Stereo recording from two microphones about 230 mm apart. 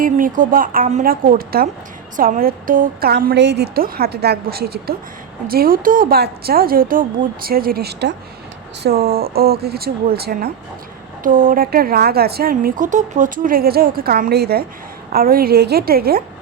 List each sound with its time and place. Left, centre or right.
0.0 s a woman's voice: right